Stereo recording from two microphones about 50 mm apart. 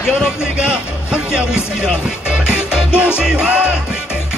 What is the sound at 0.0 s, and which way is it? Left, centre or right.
Music, centre.